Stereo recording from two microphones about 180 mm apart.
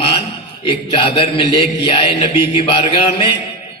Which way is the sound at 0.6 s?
30° left (ahead or behind).